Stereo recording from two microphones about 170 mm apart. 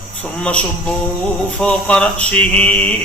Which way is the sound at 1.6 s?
5° left (ahead or behind).